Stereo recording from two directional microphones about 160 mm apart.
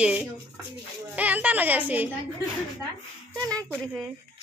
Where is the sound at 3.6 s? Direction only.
5° left (ahead or behind).